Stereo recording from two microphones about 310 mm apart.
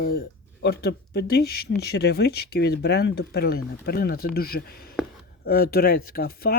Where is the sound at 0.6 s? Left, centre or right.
Left.